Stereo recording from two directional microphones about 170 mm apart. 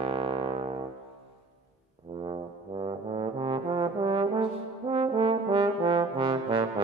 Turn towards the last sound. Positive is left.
turn(degrees=-30)  # may be behind; listen again after turning